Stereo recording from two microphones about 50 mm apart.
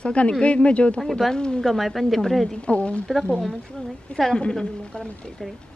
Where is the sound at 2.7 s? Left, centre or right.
Left.